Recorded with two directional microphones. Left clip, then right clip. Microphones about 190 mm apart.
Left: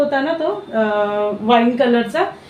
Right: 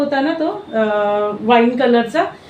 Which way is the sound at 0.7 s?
5° left (ahead or behind).